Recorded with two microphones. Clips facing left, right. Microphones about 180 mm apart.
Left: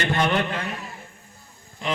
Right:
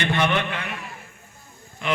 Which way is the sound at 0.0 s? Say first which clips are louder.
Even; 40° left (ahead or behind).